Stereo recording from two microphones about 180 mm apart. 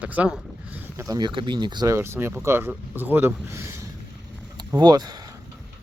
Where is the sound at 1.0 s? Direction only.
20° right (ahead or behind).